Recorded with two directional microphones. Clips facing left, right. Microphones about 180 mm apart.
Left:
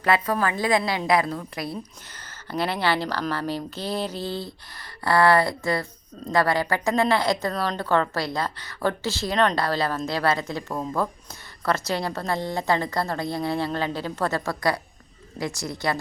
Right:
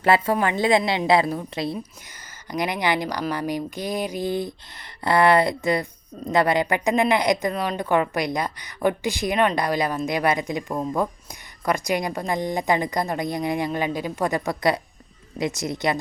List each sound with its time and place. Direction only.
0.0 s a woman's voice: 25° right (ahead or behind)